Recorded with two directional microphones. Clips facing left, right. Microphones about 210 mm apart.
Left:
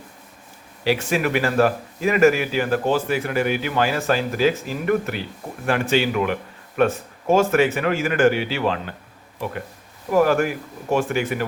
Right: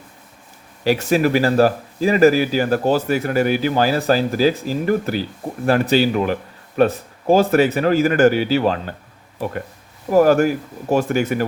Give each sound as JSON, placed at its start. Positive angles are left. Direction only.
{"t": 0.9, "sound": "speech", "side_deg": -40}
{"t": 10.1, "sound": "speech", "side_deg": -40}